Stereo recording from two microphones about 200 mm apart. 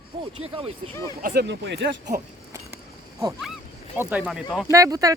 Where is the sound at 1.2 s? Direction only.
50° right (ahead or behind).